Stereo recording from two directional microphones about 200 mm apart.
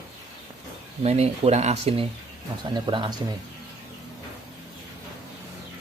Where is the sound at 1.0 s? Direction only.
30° right (ahead or behind).